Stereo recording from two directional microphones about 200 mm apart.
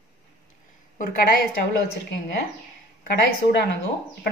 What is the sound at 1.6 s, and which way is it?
Speech, 60° left (ahead or behind).